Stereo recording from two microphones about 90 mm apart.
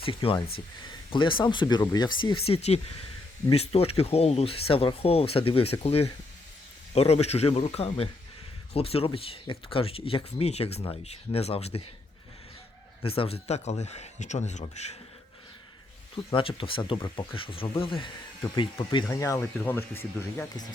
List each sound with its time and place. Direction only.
0.0 s speech: 85° left
1.1 s speech: 65° left (ahead or behind)
1.9 s speech: 50° left (ahead or behind)
2.3 s speech: 90° left
13.0 s speech: 90° left
16.1 s speech: 80° left
18.5 s speech: 60° left (ahead or behind)
19.0 s speech: 40° left (ahead or behind)
19.4 s speech: 25° left (ahead or behind)